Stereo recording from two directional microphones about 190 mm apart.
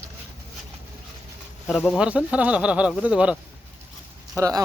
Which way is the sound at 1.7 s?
Centre (ahead or behind).